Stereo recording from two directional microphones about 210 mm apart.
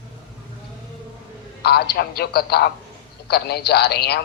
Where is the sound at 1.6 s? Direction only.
50° left (ahead or behind).